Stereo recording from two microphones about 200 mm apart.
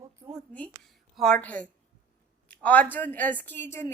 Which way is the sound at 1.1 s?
5° left (ahead or behind).